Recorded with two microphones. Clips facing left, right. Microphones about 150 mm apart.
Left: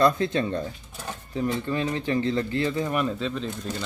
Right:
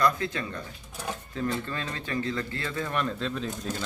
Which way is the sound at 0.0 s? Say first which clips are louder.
Left 5 dB; 30° left (ahead or behind).